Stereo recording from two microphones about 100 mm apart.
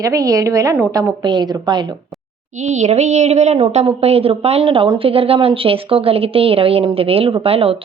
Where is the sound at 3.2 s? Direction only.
90° right.